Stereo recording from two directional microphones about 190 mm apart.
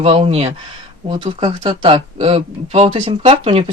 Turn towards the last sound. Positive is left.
turn(degrees=-30)  # may be behind; listen again after turning